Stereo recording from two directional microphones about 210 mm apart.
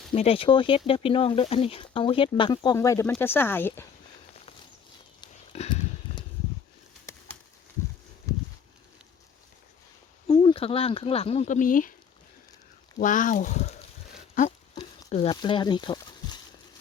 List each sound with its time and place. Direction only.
0.1 s speech: 25° left (ahead or behind); by 3.8 s 10° left (ahead or behind)
5.5 s horse: 30° left (ahead or behind)
7.0 s bird: 15° left (ahead or behind)
8.3 s a sound: 15° left (ahead or behind)
10.2 s speech: 25° left (ahead or behind); by 11.9 s 40° left (ahead or behind)
13.0 s speech: 40° left (ahead or behind)
15.1 s a sound: 25° left (ahead or behind)